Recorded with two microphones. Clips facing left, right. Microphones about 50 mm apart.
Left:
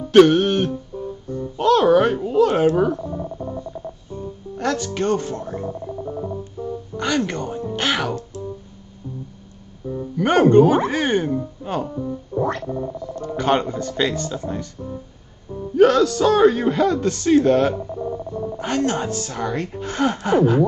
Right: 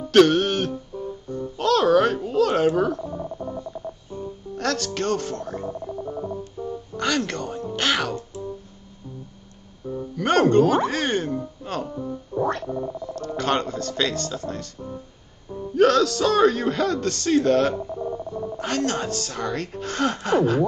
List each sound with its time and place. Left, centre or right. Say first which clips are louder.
0.1 s music: left 4 dB; centre
2.1 s a sound: left 3 dB; centre
3.0 s radio: left 2 dB; centre
4.6 s speech: left 3 dB; centre
5.7 s music: left 2 dB; centre
7.0 s speech: left 2 dB; centre
9.8 s music: left 3 dB; centre
10.9 s speech: left 4 dB; centre
11.6 s music: left 4 dB; centre
11.9 s music: left 3 dB; centre
12.6 s a sound: left 2 dB; centre
13.4 s speech: left 4 dB; centre
17.7 s speech: left 2 dB; centre